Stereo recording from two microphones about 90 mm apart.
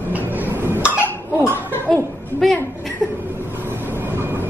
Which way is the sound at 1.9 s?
5° left (ahead or behind).